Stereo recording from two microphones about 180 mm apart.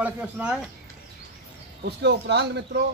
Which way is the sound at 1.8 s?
70° right (ahead or behind).